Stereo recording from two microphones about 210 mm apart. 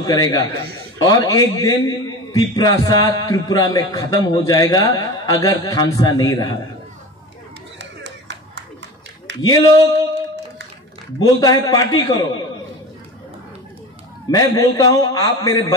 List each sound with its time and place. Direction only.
0.0 s a man's voice: 15° left (ahead or behind)
7.8 s a sound: 55° right (ahead or behind)
9.4 s a man's voice: 15° left (ahead or behind)
11.1 s a man's voice: 15° left (ahead or behind)
14.3 s a man's voice: 15° left (ahead or behind)